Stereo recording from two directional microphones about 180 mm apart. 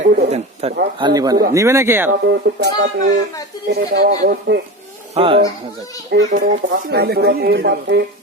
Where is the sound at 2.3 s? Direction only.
70° right (ahead or behind).